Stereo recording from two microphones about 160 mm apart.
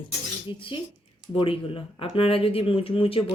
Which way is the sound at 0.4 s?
30° left (ahead or behind).